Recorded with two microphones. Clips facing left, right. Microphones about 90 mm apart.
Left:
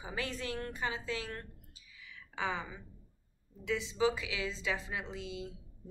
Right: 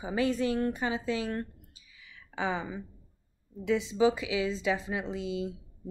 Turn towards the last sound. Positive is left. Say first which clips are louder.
# right 8 dB
turn(degrees=-20)  # may be behind; listen again after turning